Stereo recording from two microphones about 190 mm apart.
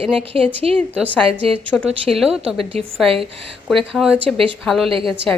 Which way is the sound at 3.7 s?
Centre (ahead or behind).